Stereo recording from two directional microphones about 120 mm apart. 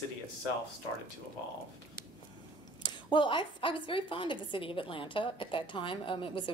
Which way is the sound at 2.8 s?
40° left (ahead or behind).